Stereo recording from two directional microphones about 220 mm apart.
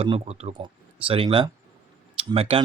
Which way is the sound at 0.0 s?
30° right (ahead or behind).